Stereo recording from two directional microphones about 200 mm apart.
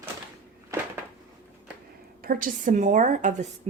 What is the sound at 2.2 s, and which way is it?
Speech, 45° right (ahead or behind).